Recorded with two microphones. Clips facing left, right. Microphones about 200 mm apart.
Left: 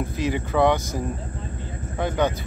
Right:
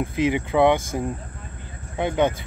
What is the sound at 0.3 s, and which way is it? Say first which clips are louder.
Speech: right 1 dB; 20° right (ahead or behind).